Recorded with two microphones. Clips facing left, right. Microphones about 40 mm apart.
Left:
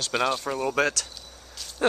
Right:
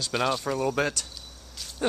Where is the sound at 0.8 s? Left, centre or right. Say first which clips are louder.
Left 3 dB; left.